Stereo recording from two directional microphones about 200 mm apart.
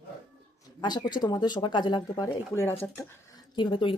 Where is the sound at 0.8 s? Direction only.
20° left (ahead or behind).